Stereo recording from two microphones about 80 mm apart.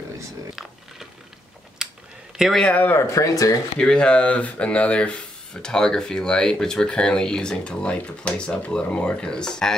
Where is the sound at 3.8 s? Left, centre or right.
Centre.